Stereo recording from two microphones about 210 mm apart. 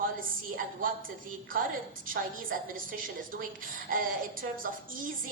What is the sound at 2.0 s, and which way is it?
A woman's voice, 40° right (ahead or behind).